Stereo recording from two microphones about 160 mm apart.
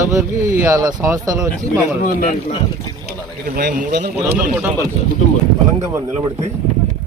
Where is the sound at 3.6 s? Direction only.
85° right.